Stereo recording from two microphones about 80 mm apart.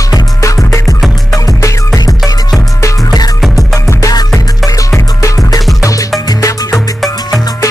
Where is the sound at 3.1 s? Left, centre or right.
Left.